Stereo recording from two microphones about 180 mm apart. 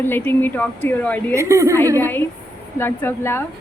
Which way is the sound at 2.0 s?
10° left (ahead or behind).